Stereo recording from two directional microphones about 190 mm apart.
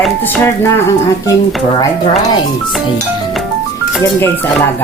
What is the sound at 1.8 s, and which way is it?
Speech, 25° left (ahead or behind).